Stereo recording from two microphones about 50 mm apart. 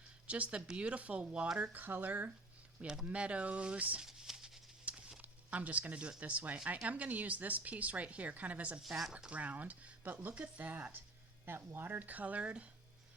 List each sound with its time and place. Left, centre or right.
0.3 s speech: right
1.8 s speech: right
3.1 s speech: right
4.0 s a sound: centre
4.9 s horse: right
5.2 s speech: right
11.4 s speech: right